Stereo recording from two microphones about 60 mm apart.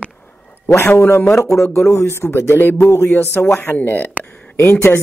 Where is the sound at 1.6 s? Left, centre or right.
Left.